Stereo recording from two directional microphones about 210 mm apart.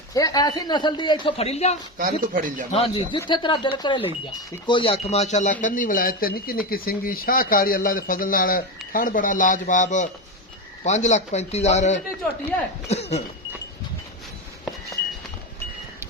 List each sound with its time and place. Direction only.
0.1 s a man's voice: 15° left (ahead or behind)
2.2 s speech: 40° right (ahead or behind)
2.7 s a man's voice: 25° left (ahead or behind)